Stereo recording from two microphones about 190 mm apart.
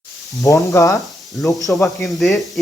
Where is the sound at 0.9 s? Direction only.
Centre (ahead or behind).